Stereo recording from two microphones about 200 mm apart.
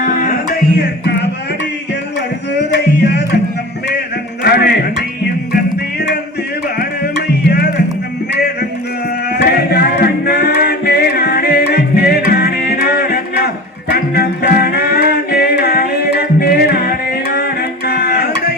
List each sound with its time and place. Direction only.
0.0 s music: 40° left (ahead or behind)
0.8 s music: 60° left (ahead or behind)
2.7 s music: 60° left (ahead or behind)
4.4 s music: 50° left (ahead or behind)
9.3 s music: 55° left (ahead or behind)